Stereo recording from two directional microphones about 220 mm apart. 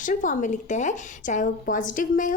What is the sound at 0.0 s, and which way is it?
A woman's voice, 35° left (ahead or behind).